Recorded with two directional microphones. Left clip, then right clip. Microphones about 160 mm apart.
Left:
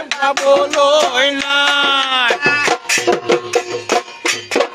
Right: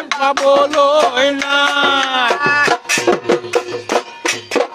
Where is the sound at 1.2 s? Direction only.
Centre (ahead or behind).